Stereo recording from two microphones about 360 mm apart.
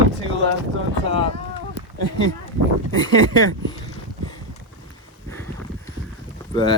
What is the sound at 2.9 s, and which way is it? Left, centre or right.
Speech, centre.